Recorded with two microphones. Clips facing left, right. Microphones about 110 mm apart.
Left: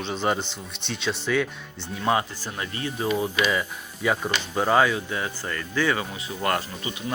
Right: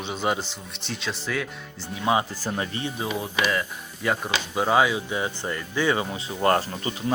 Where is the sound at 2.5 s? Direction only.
25° right (ahead or behind).